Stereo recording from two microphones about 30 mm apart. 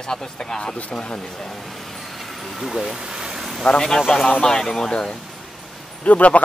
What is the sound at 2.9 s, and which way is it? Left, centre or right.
Vehicle, centre.